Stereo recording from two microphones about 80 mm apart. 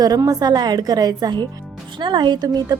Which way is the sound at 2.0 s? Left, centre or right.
Right.